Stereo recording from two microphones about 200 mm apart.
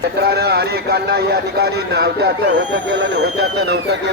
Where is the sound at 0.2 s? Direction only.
50° right (ahead or behind).